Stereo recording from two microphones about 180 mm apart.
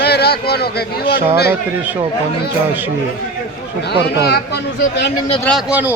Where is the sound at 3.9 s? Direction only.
65° left (ahead or behind).